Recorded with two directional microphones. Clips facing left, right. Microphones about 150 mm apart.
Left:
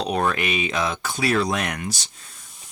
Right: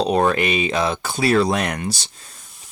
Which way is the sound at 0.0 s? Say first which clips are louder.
Right 5 dB; 30° right (ahead or behind).